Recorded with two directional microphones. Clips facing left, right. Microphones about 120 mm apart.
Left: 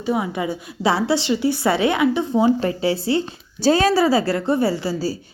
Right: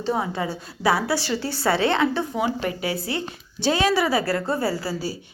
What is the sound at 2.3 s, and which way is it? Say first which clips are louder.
A woman's voice: left 7 dB; 30° left (ahead or behind).